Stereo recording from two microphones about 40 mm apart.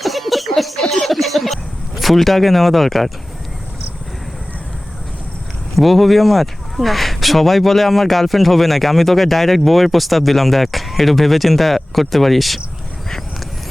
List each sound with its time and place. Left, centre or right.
0.0 s a sound: centre
2.0 s speech: centre
5.7 s speech: centre